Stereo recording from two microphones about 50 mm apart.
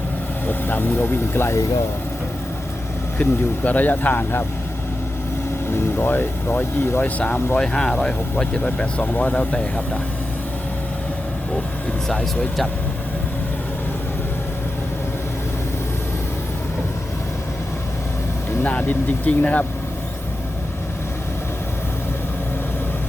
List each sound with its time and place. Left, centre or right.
0.4 s speech: left
3.2 s speech: left
5.7 s speech: left
7.0 s speech: left
7.6 s speech: centre
8.6 s speech: left
18.6 s speech: left